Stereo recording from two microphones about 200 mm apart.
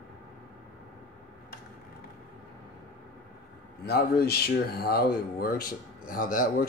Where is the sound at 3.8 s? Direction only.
55° left (ahead or behind).